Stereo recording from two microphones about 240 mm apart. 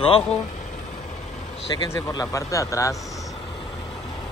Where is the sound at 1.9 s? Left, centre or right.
Centre.